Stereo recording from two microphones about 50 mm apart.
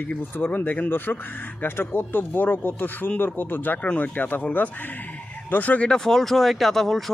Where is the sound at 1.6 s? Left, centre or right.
Left.